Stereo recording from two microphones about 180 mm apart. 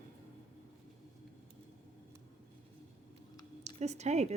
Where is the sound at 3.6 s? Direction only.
40° right (ahead or behind).